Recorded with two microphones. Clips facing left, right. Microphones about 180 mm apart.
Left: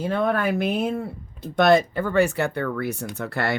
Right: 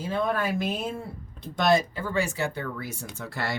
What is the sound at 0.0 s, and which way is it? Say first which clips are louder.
Speech: left 4 dB; 60° left (ahead or behind).